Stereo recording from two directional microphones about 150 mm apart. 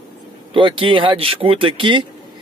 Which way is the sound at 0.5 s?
35° right (ahead or behind).